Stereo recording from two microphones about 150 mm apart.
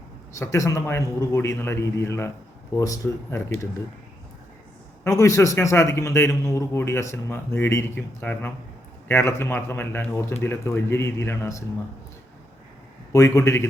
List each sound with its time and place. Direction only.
0.3 s a man's voice: 20° left (ahead or behind)
5.0 s a man's voice: 20° left (ahead or behind)
13.1 s a man's voice: 20° left (ahead or behind)